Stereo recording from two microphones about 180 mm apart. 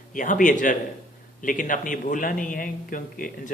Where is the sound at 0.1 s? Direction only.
50° left (ahead or behind).